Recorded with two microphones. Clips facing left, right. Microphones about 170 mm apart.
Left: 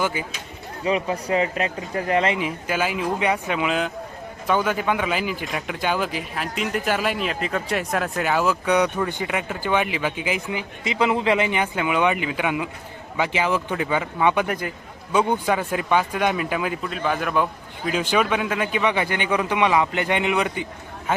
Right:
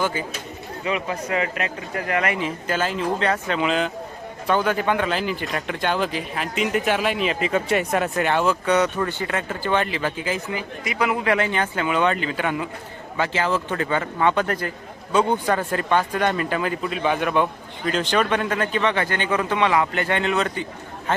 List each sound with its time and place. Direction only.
0.0 s speech: 10° left (ahead or behind)
0.9 s speech: 35° left (ahead or behind)
2.4 s speech: 10° left (ahead or behind)